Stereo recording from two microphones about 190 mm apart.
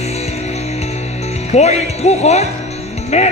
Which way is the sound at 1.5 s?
35° left (ahead or behind).